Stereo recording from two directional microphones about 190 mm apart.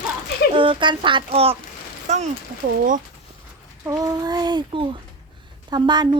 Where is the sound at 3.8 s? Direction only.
15° right (ahead or behind).